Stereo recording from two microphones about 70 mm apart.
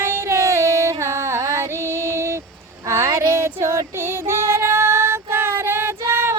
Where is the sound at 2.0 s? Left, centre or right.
Right.